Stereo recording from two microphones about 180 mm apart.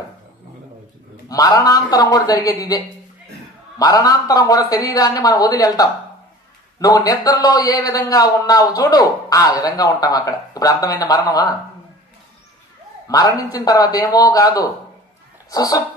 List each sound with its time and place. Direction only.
1.3 s speech: 20° left (ahead or behind)
13.1 s speech: 20° left (ahead or behind)